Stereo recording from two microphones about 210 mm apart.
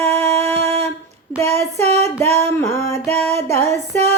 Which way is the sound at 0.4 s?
30° right (ahead or behind).